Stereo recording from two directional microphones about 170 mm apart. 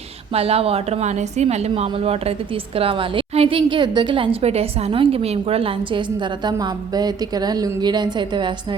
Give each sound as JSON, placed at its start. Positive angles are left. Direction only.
{"t": 0.3, "sound": "a woman's voice", "side_deg": -35}